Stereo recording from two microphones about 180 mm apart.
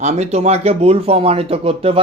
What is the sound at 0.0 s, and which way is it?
Speech, 35° right (ahead or behind).